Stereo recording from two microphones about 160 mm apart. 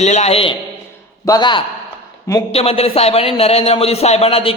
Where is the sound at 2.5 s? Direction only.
40° left (ahead or behind).